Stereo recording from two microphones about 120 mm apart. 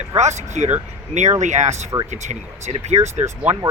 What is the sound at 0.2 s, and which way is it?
Speech, 70° right (ahead or behind).